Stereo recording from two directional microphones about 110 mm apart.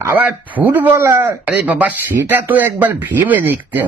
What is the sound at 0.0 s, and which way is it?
Speech, 15° right (ahead or behind).